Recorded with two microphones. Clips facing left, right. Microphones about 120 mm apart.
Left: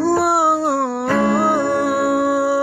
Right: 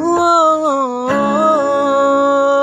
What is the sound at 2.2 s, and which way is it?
Music, 65° right (ahead or behind).